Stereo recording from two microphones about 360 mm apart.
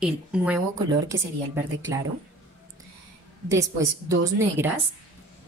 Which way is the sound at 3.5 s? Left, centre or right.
Centre.